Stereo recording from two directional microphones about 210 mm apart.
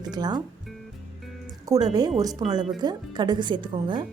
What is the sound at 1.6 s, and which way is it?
Music, 15° right (ahead or behind).